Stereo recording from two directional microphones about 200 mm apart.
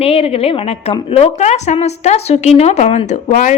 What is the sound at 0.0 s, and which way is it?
A woman's voice, 30° left (ahead or behind).